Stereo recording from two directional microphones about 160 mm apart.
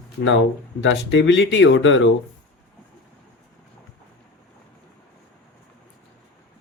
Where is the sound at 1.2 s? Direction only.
90° left.